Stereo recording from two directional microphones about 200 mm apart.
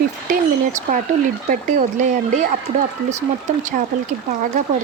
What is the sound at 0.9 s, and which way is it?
Speech, 40° right (ahead or behind).